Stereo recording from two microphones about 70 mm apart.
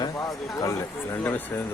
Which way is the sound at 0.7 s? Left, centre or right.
Left.